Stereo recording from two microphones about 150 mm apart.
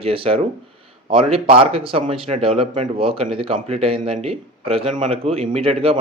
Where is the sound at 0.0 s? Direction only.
40° right (ahead or behind).